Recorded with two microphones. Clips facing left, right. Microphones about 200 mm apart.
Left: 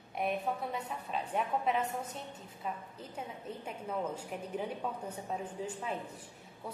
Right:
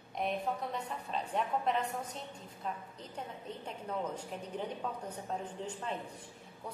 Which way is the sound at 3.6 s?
10° left (ahead or behind).